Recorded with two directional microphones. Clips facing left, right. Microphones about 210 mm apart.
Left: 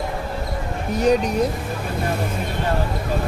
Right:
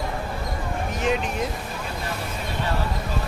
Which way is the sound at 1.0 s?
40° left (ahead or behind).